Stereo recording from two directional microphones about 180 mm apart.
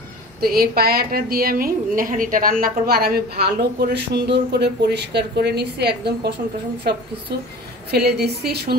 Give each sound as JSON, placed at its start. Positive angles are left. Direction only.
{"t": 0.4, "sound": "speech", "side_deg": -55}